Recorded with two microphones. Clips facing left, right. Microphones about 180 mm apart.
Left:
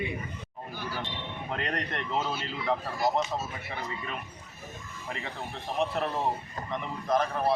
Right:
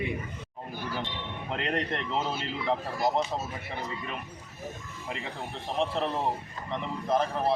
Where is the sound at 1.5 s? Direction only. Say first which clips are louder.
Right 3 dB; 20° right (ahead or behind).